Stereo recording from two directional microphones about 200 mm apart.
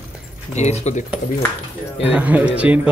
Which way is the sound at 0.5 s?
35° left (ahead or behind).